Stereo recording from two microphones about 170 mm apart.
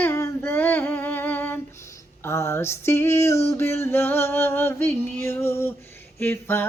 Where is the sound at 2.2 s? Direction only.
15° left (ahead or behind).